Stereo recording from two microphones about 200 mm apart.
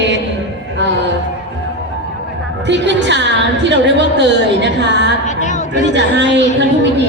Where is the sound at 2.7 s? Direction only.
60° right (ahead or behind).